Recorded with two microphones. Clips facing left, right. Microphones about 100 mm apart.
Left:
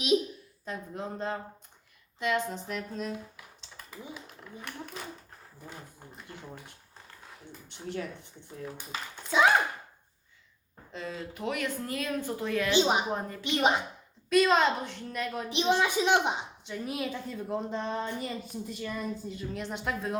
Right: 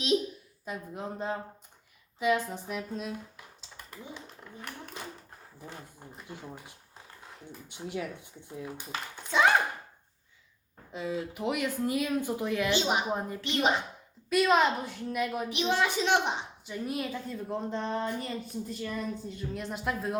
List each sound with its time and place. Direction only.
0.6 s speech: 10° right (ahead or behind)
3.6 s typing: centre (ahead or behind)
6.1 s speech: 5° right (ahead or behind)
8.9 s speech: 5° left (ahead or behind)
10.9 s speech: 10° right (ahead or behind)
12.7 s speech: 20° left (ahead or behind)
13.1 s speech: 15° right (ahead or behind)
13.4 s a woman's voice: 15° left (ahead or behind)
14.3 s speech: 5° right (ahead or behind)
15.4 s a woman's voice: 25° left (ahead or behind)
16.6 s speech: centre (ahead or behind)